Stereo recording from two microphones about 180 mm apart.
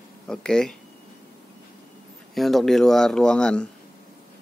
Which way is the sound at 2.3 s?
Centre (ahead or behind).